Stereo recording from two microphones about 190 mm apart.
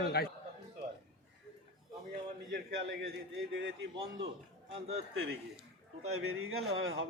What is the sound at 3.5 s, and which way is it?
Speech, 80° right.